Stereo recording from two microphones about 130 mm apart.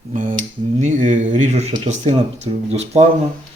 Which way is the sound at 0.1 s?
90° right.